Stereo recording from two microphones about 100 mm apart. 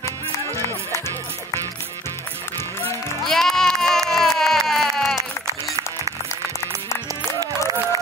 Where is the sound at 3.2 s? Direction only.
5° left (ahead or behind).